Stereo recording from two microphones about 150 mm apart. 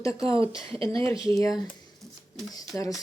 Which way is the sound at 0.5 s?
35° right (ahead or behind).